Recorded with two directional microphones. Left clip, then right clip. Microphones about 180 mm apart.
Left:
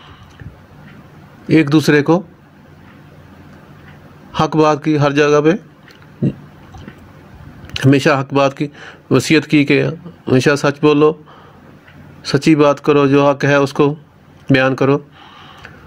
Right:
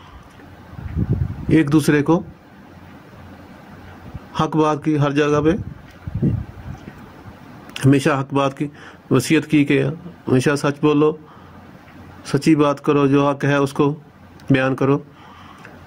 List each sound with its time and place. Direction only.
1.5 s speech: 40° left (ahead or behind)
4.3 s speech: 40° left (ahead or behind)
7.7 s speech: 40° left (ahead or behind)
12.2 s speech: 35° left (ahead or behind)